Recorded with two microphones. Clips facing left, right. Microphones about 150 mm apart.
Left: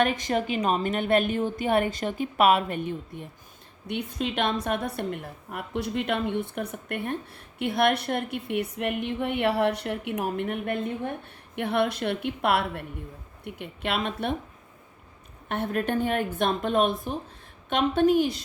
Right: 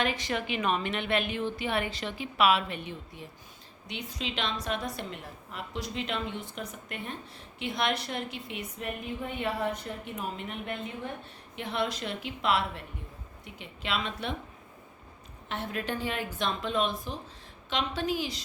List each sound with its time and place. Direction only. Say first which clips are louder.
0.0 s a woman's voice: left 6 dB; 50° left (ahead or behind)
15.4 s a woman's voice: left 6 dB; 55° left (ahead or behind)